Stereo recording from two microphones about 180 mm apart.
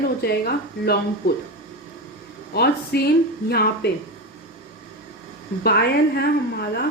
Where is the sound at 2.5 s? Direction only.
60° left (ahead or behind).